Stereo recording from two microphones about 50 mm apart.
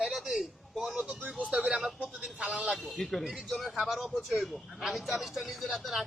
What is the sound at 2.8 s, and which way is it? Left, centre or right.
Speech, centre.